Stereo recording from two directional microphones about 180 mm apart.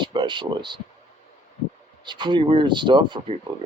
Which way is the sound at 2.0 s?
25° right (ahead or behind).